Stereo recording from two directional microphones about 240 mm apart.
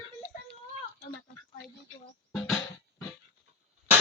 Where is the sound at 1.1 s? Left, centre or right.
Left.